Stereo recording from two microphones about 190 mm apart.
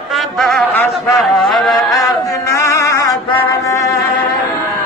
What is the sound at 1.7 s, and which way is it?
Chant, 15° left (ahead or behind).